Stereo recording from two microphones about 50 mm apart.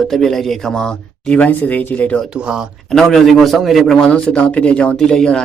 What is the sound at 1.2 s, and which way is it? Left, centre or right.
Speech, left.